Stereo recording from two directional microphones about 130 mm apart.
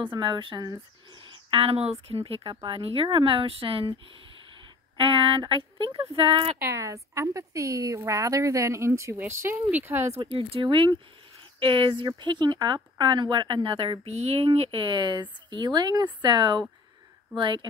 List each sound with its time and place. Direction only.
0.0 s speech: 40° right (ahead or behind)
4.9 s speech: 40° right (ahead or behind)
6.7 s a woman's voice: 25° right (ahead or behind)
10.2 s speech: 40° right (ahead or behind)
14.0 s speech: 55° right (ahead or behind); by 17.6 s 40° right (ahead or behind)